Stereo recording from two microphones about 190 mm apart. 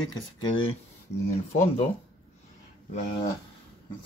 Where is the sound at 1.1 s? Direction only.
65° left (ahead or behind).